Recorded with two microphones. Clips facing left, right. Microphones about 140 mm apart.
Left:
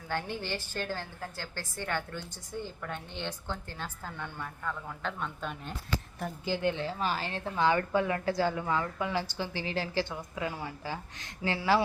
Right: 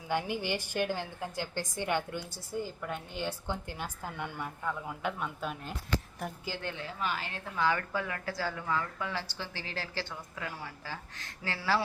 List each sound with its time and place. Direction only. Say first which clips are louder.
0.1 s a woman's voice: right 3 dB; 10° right (ahead or behind)
6.6 s a woman's voice: left 11 dB; 20° left (ahead or behind)
6.8 s a woman's voice: left 3 dB; 35° left (ahead or behind); by 11.8 s 20° left (ahead or behind)